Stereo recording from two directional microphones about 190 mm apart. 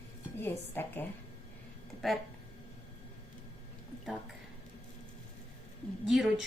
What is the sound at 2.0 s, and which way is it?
Speech, centre (ahead or behind).